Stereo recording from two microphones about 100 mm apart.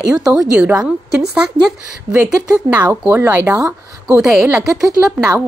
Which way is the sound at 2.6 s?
15° right (ahead or behind).